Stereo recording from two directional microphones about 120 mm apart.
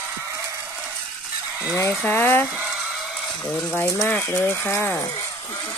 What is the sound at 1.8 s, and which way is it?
Speech, 20° left (ahead or behind).